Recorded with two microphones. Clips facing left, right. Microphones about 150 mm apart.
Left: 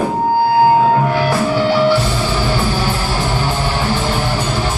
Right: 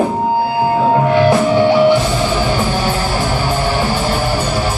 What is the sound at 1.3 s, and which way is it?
Music, 20° right (ahead or behind).